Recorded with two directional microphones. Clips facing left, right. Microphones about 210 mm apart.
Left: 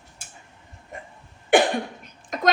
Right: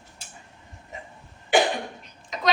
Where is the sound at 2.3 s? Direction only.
50° left (ahead or behind).